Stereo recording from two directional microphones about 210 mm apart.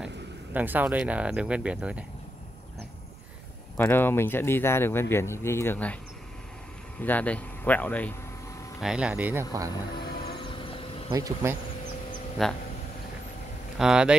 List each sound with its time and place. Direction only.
0.0 s speech: 10° right (ahead or behind)
3.7 s speech: 10° left (ahead or behind)
7.0 s speech: 5° left (ahead or behind)
8.8 s speech: 5° right (ahead or behind)
10.0 s a sound: 50° left (ahead or behind)
10.6 s insect: 25° left (ahead or behind)
11.1 s speech: 15° right (ahead or behind)
12.4 s speech: centre (ahead or behind)
13.7 s speech: 5° right (ahead or behind)